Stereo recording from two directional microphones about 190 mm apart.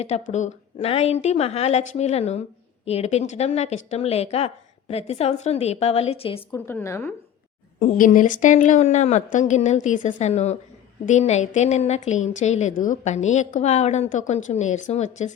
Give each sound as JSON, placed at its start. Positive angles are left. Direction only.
{"t": 0.0, "sound": "a woman's voice", "side_deg": 35}
{"t": 6.7, "sound": "a woman's voice", "side_deg": 15}
{"t": 7.8, "sound": "a woman's voice", "side_deg": 45}